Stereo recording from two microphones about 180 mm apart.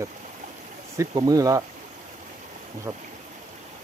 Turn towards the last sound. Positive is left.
turn(degrees=-25)  # may be behind; listen again after turning